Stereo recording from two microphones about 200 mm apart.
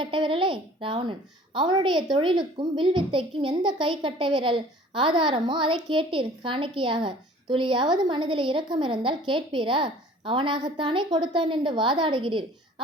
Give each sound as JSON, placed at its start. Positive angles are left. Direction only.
{"t": 0.0, "sound": "a woman's voice", "side_deg": -25}